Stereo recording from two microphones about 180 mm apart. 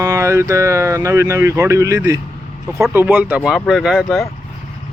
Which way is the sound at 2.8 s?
10° right (ahead or behind).